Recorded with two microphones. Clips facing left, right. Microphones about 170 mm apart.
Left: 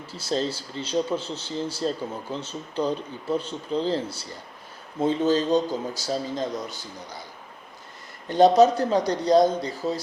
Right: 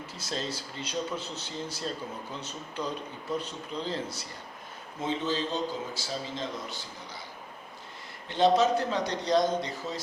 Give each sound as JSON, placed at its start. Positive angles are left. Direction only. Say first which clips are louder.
{"t": 0.1, "sound": "speech", "louder": "left 9 dB", "side_deg": 30}
{"t": 4.9, "sound": "a man's voice", "louder": "left 9 dB", "side_deg": 40}
{"t": 8.3, "sound": "a man's voice", "louder": "left 7 dB", "side_deg": 40}